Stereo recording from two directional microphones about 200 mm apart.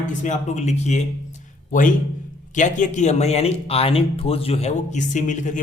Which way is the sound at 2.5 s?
40° left (ahead or behind).